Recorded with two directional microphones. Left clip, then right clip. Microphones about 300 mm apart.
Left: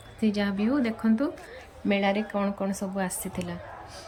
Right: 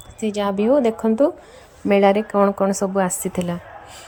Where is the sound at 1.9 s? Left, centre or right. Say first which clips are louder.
Right 11 dB; centre.